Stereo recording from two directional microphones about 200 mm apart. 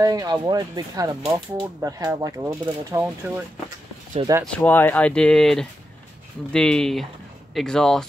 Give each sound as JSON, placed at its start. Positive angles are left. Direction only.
{"t": 0.0, "sound": "speech", "side_deg": -20}
{"t": 4.5, "sound": "speech", "side_deg": 10}